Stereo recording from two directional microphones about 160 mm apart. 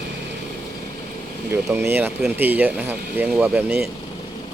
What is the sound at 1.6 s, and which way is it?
Speech, 15° right (ahead or behind).